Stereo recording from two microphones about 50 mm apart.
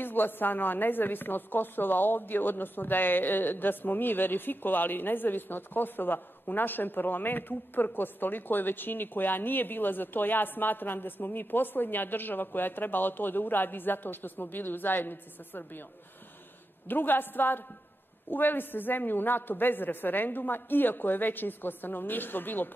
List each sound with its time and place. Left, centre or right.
0.0 s a woman's voice: left
16.8 s a woman's voice: left